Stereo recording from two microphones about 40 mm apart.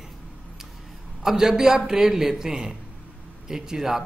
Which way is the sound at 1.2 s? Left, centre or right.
Centre.